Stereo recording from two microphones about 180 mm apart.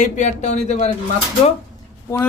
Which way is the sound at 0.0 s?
40° left (ahead or behind).